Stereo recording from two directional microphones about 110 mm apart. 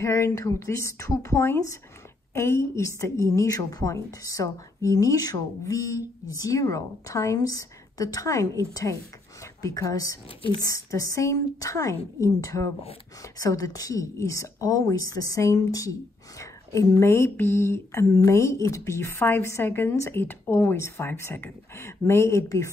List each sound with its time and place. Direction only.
0.0 s a woman's voice: 25° left (ahead or behind)